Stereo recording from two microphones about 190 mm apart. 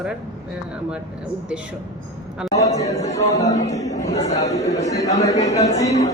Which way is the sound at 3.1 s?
15° left (ahead or behind).